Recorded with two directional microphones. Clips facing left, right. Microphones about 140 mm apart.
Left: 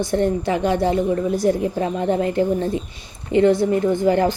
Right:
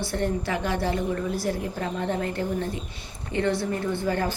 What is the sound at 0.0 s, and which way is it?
A woman's voice, 20° left (ahead or behind).